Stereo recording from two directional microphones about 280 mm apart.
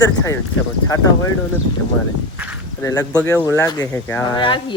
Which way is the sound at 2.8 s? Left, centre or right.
Centre.